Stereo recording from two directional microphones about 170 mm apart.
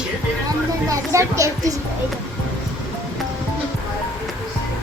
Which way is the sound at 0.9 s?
20° right (ahead or behind).